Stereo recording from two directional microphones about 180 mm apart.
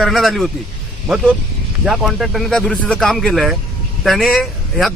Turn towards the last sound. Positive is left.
turn(degrees=0)  # may be behind; listen again after turning